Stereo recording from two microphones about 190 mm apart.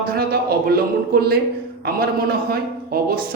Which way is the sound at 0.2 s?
55° right (ahead or behind).